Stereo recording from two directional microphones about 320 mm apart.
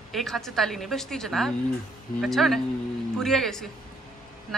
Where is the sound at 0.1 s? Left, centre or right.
Centre.